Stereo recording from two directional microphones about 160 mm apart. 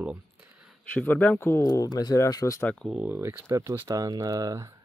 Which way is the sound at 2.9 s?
10° right (ahead or behind).